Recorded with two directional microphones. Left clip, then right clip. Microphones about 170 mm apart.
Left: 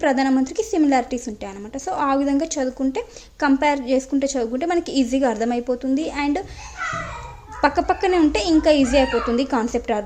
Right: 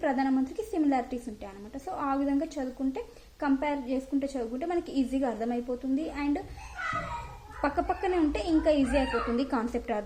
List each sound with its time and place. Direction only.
0.0 s a woman's voice: 35° left (ahead or behind)
7.6 s a woman's voice: 35° left (ahead or behind)